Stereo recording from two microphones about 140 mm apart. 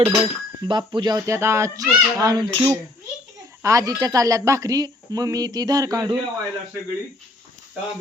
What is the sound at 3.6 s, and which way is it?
Speech, 25° right (ahead or behind).